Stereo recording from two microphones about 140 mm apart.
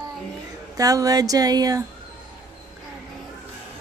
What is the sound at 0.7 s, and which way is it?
Speech, 25° right (ahead or behind).